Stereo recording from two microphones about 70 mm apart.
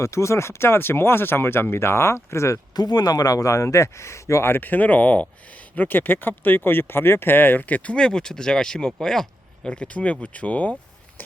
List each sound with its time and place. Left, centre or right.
0.0 s speech: left
2.7 s speech: left; by 10.8 s centre